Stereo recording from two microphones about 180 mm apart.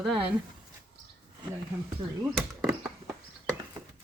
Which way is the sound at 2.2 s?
15° right (ahead or behind).